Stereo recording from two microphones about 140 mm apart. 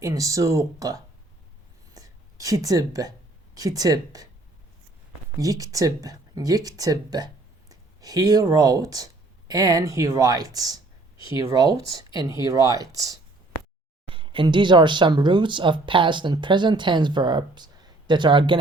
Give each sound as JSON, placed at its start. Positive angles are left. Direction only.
{"t": 0.0, "sound": "speech", "side_deg": -25}
{"t": 1.9, "sound": "a sound", "side_deg": -25}
{"t": 3.5, "sound": "speech", "side_deg": -25}
{"t": 5.4, "sound": "speech", "side_deg": -25}
{"t": 14.1, "sound": "speech", "side_deg": -35}